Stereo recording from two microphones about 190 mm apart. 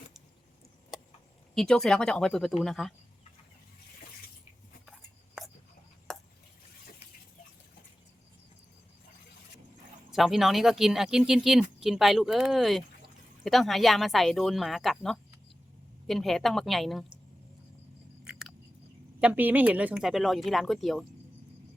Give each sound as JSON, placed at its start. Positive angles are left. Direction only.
{"t": 1.5, "sound": "speech", "side_deg": 5}
{"t": 4.9, "sound": "a sound", "side_deg": 0}
{"t": 6.1, "sound": "chopping", "side_deg": 0}
{"t": 10.1, "sound": "speech", "side_deg": 0}
{"t": 18.3, "sound": "chewing", "side_deg": 0}
{"t": 19.2, "sound": "speech", "side_deg": -10}